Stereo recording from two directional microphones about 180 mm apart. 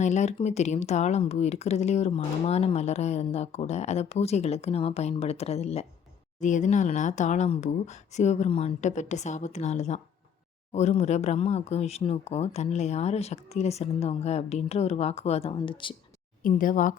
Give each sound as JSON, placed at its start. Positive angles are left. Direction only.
{"t": 0.0, "sound": "speech", "side_deg": 40}
{"t": 16.4, "sound": "speech", "side_deg": 50}